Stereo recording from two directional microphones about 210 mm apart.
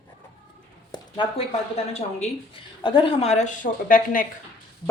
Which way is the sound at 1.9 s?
30° left (ahead or behind).